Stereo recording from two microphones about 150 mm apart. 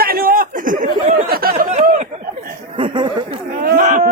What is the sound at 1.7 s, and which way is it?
Snicker, 50° right (ahead or behind).